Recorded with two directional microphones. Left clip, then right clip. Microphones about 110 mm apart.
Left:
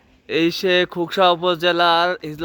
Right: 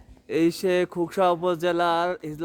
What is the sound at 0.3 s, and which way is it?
Speech, 15° left (ahead or behind).